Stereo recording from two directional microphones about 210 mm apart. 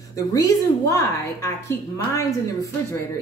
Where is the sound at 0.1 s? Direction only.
15° left (ahead or behind).